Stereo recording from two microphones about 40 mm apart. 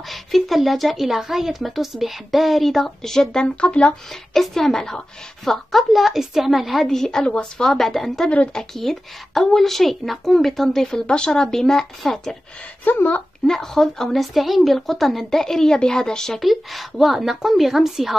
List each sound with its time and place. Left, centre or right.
0.1 s a woman's voice: centre
3.6 s speech: left
4.1 s a woman's voice: centre
6.9 s speech: centre
7.8 s a woman's voice: centre
11.1 s speech: left
12.8 s speech: left
13.5 s a woman's voice: centre
15.4 s speech: centre
16.3 s a woman's voice: centre